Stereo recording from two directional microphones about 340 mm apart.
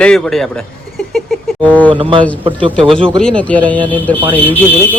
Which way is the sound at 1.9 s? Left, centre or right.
Centre.